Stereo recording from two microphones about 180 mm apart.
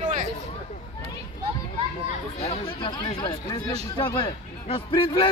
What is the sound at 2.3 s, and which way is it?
A man's voice, 35° left (ahead or behind).